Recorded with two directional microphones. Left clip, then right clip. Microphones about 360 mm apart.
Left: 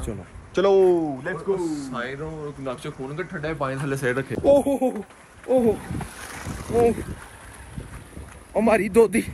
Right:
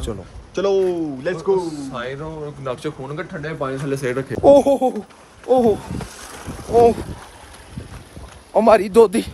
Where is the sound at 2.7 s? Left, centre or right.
Right.